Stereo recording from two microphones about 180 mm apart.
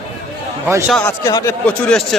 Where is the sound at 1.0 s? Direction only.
20° left (ahead or behind).